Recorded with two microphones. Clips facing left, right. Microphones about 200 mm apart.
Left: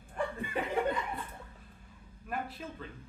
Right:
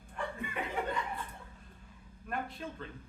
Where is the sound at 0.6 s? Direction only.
35° left (ahead or behind).